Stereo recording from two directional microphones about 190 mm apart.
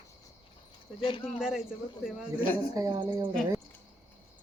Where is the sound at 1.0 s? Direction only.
25° left (ahead or behind).